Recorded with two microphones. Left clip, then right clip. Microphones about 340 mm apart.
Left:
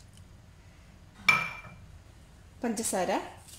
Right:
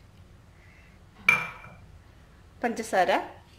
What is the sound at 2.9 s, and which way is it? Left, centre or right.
Speech, right.